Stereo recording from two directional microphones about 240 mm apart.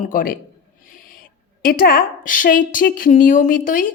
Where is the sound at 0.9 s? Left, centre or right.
Left.